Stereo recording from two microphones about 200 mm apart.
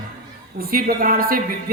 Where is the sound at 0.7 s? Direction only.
45° right (ahead or behind).